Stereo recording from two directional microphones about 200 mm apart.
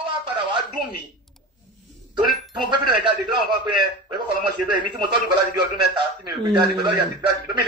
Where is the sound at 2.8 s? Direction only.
20° right (ahead or behind).